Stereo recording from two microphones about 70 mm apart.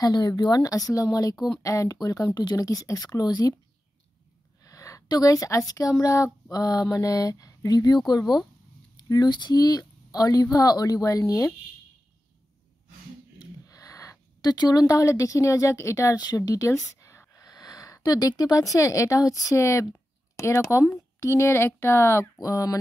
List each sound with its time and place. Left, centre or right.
0.0 s speech: left
2.3 s speech: left
2.6 s speech: left
4.6 s a sound: left
5.0 s a woman's voice: left
5.3 s speech: left
6.5 s speech: left
13.4 s a sound: left
14.4 s speech: left
17.6 s speech: left
22.4 s speech: left